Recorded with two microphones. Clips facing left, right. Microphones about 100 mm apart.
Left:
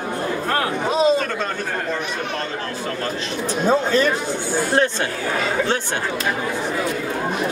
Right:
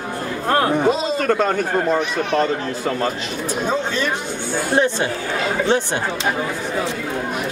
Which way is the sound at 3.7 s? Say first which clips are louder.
Left 6 dB; 40° left (ahead or behind).